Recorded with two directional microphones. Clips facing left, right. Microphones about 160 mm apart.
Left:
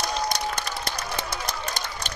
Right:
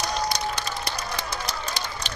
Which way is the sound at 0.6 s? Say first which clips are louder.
Even; 50° left (ahead or behind).